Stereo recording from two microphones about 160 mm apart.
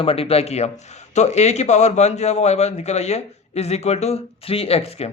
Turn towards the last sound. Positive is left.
turn(degrees=40)  # may be behind; listen again after turning